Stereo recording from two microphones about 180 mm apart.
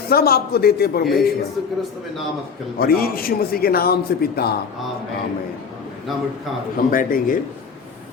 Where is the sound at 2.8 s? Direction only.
55° left (ahead or behind).